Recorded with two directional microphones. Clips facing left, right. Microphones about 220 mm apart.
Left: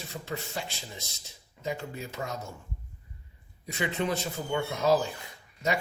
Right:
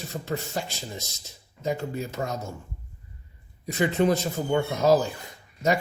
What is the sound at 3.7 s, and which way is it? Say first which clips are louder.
A man's voice: right 8 dB; 40° right (ahead or behind).